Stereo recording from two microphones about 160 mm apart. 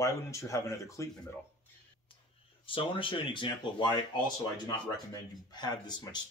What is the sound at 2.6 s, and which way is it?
Speech, 35° left (ahead or behind).